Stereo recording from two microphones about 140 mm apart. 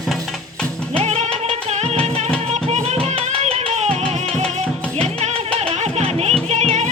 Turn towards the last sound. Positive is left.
turn(degrees=-55)  # may be behind; listen again after turning